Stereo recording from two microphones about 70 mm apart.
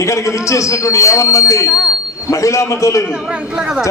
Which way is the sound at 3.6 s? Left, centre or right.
Centre.